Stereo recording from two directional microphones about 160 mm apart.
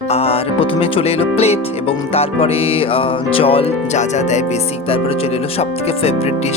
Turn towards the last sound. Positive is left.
turn(degrees=40)  # may be behind; listen again after turning